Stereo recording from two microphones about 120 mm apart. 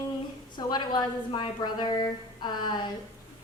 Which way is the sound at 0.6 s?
35° left (ahead or behind).